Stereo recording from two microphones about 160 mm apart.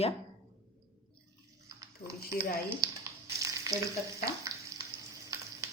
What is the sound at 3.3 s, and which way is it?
Frying, 20° right (ahead or behind).